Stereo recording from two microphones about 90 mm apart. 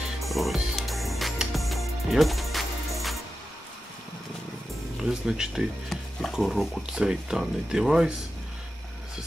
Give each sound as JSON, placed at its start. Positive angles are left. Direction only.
{"t": 0.2, "sound": "music", "side_deg": 0}
{"t": 5.0, "sound": "speech", "side_deg": -5}